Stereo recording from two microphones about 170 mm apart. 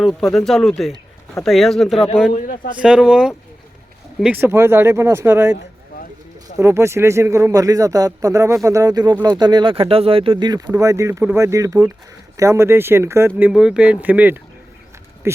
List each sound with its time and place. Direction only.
0.0 s speech: centre (ahead or behind)
6.6 s speech: 15° right (ahead or behind)
13.5 s speech: 5° right (ahead or behind)